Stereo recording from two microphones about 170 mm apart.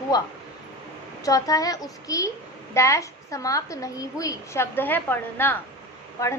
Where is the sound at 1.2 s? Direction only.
20° left (ahead or behind).